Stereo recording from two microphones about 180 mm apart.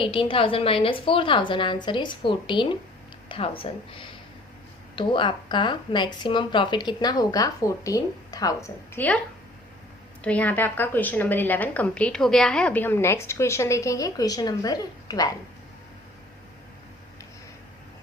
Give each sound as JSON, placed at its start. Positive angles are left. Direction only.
{"t": 0.0, "sound": "speech", "side_deg": 30}
{"t": 10.2, "sound": "a woman's voice", "side_deg": 10}